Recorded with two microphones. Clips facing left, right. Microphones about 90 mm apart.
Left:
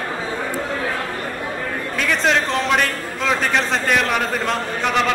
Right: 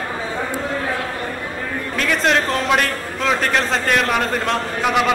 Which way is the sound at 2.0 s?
Centre (ahead or behind).